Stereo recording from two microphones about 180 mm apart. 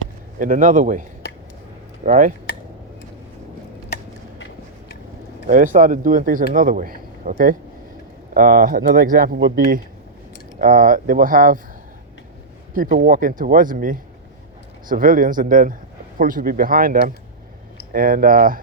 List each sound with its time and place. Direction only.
0.3 s a man's voice: 50° right (ahead or behind)
2.0 s a man's voice: 45° right (ahead or behind)
3.8 s a sound: 65° left (ahead or behind)
5.5 s a man's voice: 50° right (ahead or behind)
12.7 s a man's voice: 50° right (ahead or behind)